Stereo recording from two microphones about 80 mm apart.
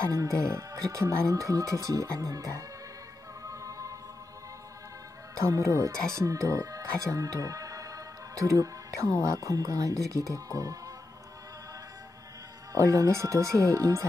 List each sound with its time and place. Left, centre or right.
0.1 s speech: right
3.4 s music: right
5.4 s speech: right
12.7 s speech: right